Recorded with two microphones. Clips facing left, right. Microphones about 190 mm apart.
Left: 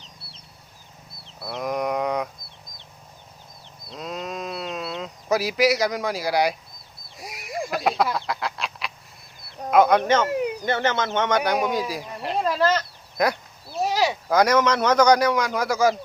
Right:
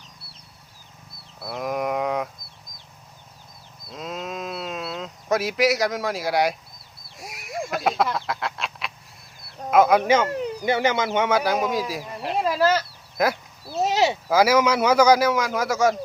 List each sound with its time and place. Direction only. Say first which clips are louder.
1.4 s livestock: even; centre (ahead or behind)
3.8 s sheep: even; centre (ahead or behind)
7.2 s duck: left 1 dB; centre (ahead or behind)
9.4 s a sound: even; centre (ahead or behind)
10.2 s speech: left 3 dB; 10° left (ahead or behind)
10.6 s speech: right 2 dB; 10° right (ahead or behind)
13.7 s a sound: right 2 dB; 25° right (ahead or behind)
14.3 s speech: even; 5° right (ahead or behind)